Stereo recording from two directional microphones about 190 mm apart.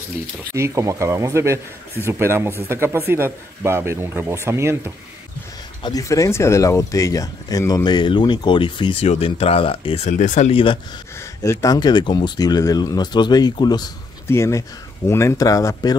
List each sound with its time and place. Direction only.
0.6 s a man's voice: 15° right (ahead or behind)
5.8 s speech: 20° left (ahead or behind)
11.4 s speech: 15° left (ahead or behind)